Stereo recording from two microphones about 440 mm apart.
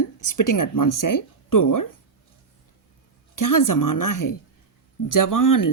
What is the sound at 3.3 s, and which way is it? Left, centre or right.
Speech, left.